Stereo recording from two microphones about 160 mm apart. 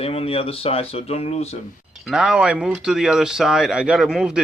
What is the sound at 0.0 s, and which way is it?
Speech, 35° left (ahead or behind).